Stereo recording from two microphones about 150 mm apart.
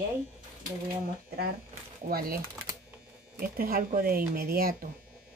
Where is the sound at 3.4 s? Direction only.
75° right (ahead or behind).